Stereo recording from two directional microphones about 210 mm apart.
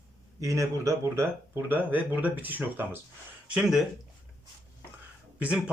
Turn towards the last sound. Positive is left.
turn(degrees=-5)  # may be behind; listen again after turning